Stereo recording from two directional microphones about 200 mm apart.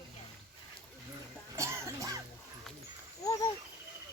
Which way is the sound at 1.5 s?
15° right (ahead or behind).